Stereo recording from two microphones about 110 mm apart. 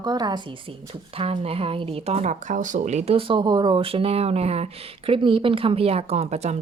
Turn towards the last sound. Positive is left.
turn(degrees=-80)